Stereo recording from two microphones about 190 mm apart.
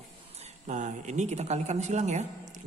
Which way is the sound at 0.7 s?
40° right (ahead or behind).